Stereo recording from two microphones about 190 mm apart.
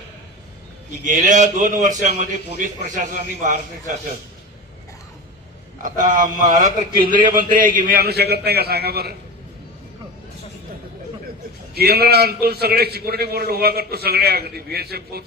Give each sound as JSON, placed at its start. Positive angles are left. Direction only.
{"t": 1.0, "sound": "a man's voice", "side_deg": -40}
{"t": 6.3, "sound": "a man's voice", "side_deg": -45}
{"t": 11.7, "sound": "a man's voice", "side_deg": -55}